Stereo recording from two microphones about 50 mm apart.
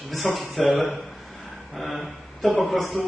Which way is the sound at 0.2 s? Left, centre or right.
Centre.